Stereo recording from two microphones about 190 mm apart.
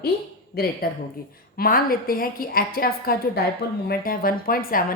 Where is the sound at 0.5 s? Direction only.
55° left (ahead or behind).